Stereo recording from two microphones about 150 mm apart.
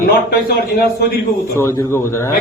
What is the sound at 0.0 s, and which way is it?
Speech, 80° left.